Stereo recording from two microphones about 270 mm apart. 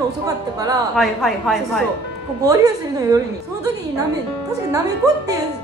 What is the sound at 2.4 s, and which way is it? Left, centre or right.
A woman's voice, centre.